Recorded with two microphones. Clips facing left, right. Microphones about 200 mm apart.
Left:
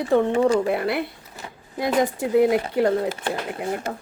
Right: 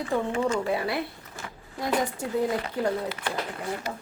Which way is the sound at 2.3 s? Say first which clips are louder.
Left 9 dB; 75° left (ahead or behind).